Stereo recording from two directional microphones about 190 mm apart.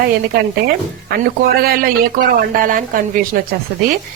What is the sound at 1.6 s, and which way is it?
Speech, 50° right (ahead or behind).